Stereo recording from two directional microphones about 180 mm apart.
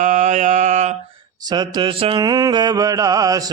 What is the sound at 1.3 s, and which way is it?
Mantra, 25° right (ahead or behind).